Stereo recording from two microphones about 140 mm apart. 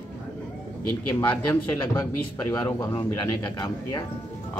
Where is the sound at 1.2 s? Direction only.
30° left (ahead or behind).